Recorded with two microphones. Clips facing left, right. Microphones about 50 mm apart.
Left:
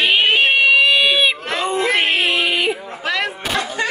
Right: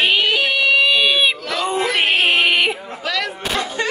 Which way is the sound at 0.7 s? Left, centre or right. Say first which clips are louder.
Left 1 dB; centre.